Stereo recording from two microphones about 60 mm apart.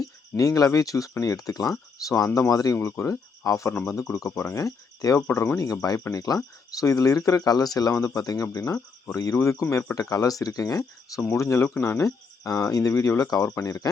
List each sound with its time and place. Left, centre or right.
0.0 s speech: left
1.2 s speech: left
1.7 s speech: left
2.5 s speech: left
2.7 s cricket: left
4.4 s speech: left
5.5 s speech: left
6.1 s speech: left
8.6 s speech: left
9.3 s speech: left
11.3 s speech: left
12.5 s speech: left